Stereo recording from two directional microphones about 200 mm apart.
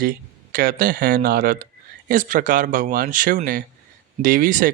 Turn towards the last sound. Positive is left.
turn(degrees=-45)  # may be behind; listen again after turning